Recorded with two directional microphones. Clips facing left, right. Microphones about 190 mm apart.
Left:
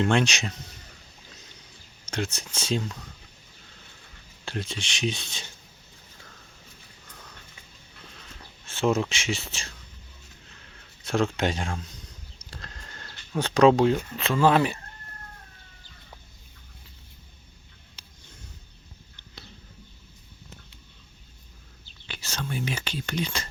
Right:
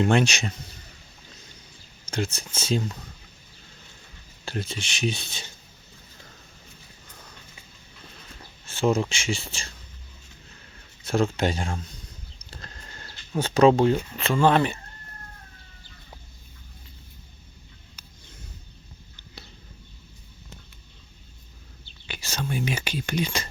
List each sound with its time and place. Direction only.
0.0 s speech: 5° right (ahead or behind)
2.0 s speech: centre (ahead or behind)
4.4 s speech: centre (ahead or behind)
8.6 s speech: centre (ahead or behind)
11.0 s speech: centre (ahead or behind)
18.0 s a sound: 30° left (ahead or behind)
22.0 s whispering: 10° right (ahead or behind)